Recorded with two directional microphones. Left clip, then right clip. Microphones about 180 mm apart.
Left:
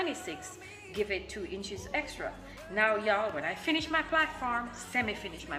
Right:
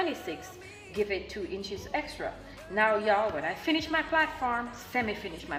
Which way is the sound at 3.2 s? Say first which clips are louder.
Right 3 dB; 15° left (ahead or behind).